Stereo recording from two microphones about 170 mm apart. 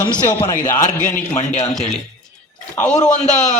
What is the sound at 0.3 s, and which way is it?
A man's voice, 20° left (ahead or behind).